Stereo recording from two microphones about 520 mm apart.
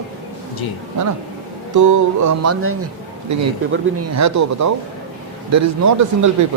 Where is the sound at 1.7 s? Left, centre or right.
Right.